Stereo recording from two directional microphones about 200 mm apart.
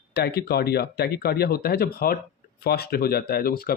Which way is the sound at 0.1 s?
55° left (ahead or behind).